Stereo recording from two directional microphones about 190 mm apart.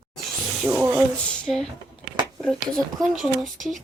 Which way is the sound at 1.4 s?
5° left (ahead or behind).